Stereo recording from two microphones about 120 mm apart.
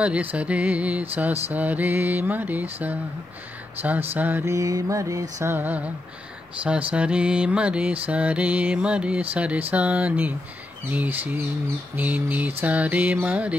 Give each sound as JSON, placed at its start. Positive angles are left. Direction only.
{"t": 0.0, "sound": "mantra", "side_deg": -10}
{"t": 4.1, "sound": "a sound", "side_deg": -15}
{"t": 5.5, "sound": "mantra", "side_deg": -15}